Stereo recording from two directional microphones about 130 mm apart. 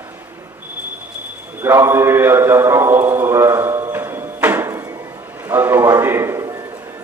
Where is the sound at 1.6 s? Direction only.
20° right (ahead or behind).